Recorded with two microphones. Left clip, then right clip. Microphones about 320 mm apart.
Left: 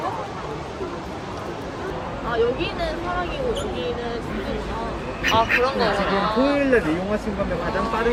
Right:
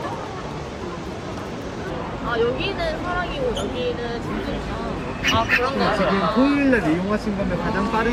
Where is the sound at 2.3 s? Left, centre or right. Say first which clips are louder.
Even; right.